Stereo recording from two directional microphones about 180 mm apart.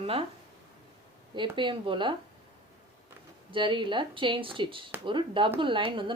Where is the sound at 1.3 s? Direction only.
25° right (ahead or behind).